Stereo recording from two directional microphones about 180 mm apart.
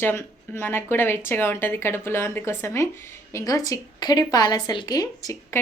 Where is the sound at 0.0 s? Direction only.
15° left (ahead or behind).